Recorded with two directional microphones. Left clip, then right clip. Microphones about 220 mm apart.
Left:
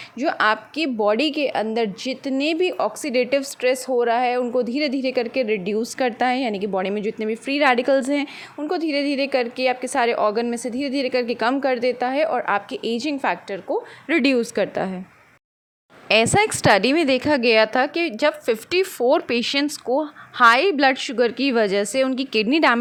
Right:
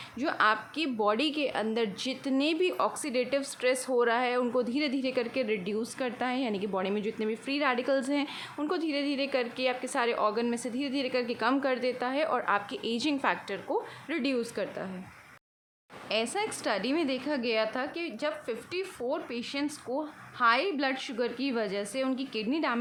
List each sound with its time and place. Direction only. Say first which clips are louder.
0.2 s a woman's voice: left 7 dB; 25° left (ahead or behind)
14.1 s a woman's voice: left 13 dB; 30° left (ahead or behind)
16.0 s a woman's voice: left 14 dB; 35° left (ahead or behind)